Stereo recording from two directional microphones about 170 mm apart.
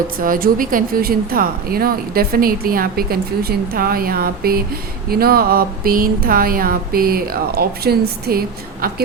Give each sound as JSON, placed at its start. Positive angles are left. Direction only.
{"t": 0.2, "sound": "speech", "side_deg": -55}